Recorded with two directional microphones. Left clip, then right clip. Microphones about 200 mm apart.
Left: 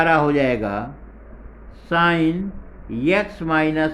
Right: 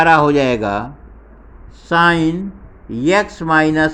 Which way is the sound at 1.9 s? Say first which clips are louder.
Right 5 dB; 30° right (ahead or behind).